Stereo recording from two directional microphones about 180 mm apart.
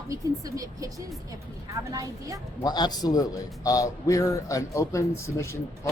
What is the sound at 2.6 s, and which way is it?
A man's voice, 25° left (ahead or behind).